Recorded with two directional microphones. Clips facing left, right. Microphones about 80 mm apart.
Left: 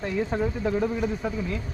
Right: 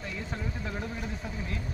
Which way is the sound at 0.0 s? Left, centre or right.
Left.